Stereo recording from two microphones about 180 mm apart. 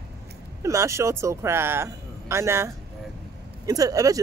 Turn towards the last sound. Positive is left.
turn(degrees=-20)  # may be behind; listen again after turning